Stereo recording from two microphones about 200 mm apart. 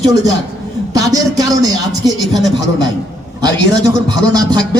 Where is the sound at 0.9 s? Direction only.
20° right (ahead or behind).